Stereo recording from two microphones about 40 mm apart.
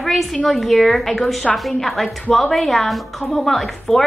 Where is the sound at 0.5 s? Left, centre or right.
Centre.